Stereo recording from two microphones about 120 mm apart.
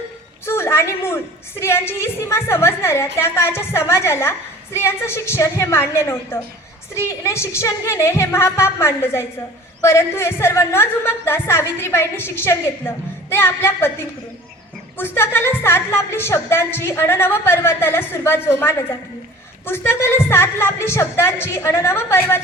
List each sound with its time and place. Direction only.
0.4 s a woman's voice: 20° left (ahead or behind)